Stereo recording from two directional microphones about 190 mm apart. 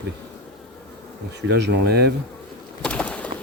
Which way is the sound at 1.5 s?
60° right (ahead or behind).